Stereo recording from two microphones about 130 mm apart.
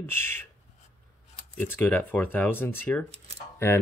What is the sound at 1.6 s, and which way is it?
Speech, 15° left (ahead or behind).